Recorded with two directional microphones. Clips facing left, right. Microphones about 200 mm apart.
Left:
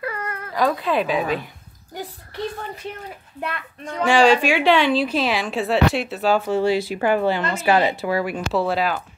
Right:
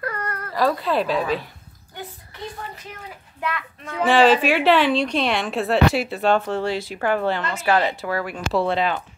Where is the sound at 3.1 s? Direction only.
35° left (ahead or behind).